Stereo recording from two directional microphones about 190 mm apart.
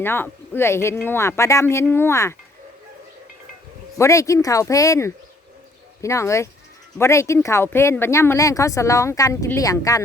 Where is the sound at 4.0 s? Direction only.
15° left (ahead or behind).